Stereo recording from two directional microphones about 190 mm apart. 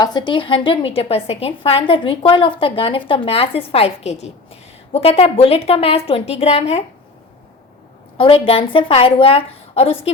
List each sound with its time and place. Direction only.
0.0 s a woman's voice: 25° left (ahead or behind)
8.2 s a woman's voice: 30° left (ahead or behind)